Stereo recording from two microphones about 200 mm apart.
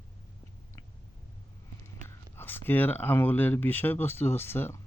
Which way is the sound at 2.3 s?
10° left (ahead or behind).